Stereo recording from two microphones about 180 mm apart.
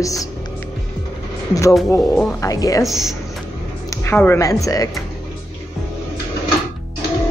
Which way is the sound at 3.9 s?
10° left (ahead or behind).